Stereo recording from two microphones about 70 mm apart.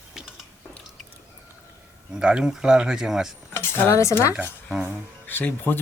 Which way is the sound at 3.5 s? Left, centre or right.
Left.